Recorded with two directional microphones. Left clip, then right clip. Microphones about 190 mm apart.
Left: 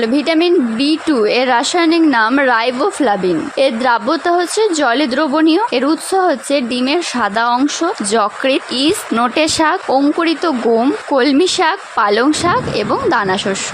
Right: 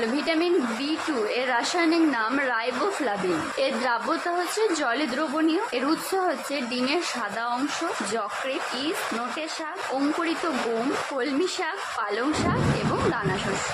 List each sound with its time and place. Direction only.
0.0 s a woman's voice: 45° left (ahead or behind)